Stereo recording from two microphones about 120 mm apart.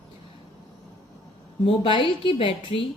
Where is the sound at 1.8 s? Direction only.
45° left (ahead or behind).